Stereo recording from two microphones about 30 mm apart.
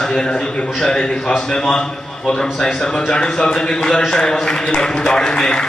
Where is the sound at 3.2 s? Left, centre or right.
Left.